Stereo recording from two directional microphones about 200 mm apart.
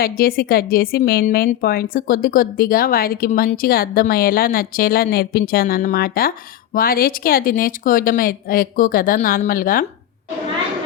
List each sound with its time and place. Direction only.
0.0 s a woman's voice: 50° left (ahead or behind)